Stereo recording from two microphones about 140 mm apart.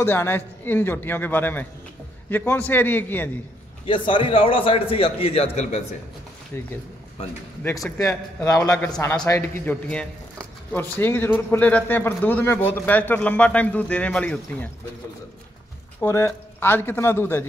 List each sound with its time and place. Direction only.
0.0 s a man's voice: 15° left (ahead or behind)
3.8 s a man's voice: 35° left (ahead or behind)
6.5 s a man's voice: 15° left (ahead or behind)
8.0 s speech: 20° left (ahead or behind)
8.7 s a man's voice: 5° left (ahead or behind)
16.0 s a man's voice: 20° left (ahead or behind)